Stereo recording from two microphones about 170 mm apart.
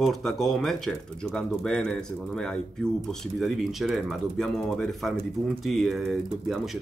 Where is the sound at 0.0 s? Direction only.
Centre (ahead or behind).